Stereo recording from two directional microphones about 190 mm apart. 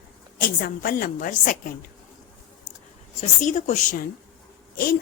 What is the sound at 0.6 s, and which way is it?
A woman's voice, 50° left (ahead or behind).